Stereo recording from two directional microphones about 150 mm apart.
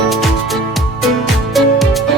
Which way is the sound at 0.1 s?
Centre (ahead or behind).